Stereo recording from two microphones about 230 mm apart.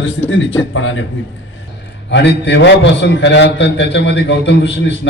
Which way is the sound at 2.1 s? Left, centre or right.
Left.